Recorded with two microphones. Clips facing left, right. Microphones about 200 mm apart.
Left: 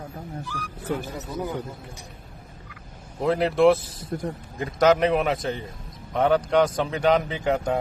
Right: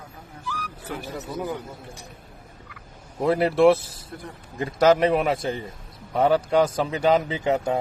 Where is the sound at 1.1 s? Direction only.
5° right (ahead or behind).